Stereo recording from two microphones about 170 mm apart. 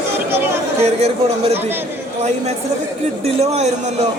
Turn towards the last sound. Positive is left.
turn(degrees=-40)  # may be behind; listen again after turning